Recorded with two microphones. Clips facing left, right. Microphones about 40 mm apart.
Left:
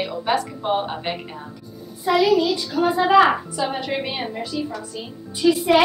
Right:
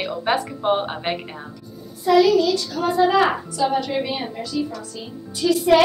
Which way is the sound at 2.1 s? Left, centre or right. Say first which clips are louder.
Right 2 dB; centre.